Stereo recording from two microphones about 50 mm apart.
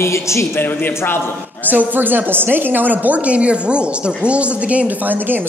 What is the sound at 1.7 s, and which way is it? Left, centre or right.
A woman's voice, right.